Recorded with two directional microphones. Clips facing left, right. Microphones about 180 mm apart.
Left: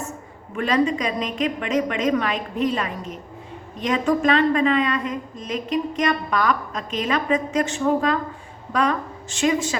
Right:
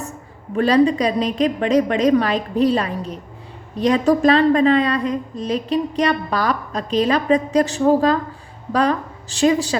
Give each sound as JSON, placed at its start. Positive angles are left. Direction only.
{"t": 0.5, "sound": "a woman's voice", "side_deg": -35}